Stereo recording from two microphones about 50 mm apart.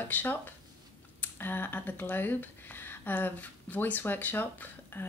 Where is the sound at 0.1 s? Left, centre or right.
Left.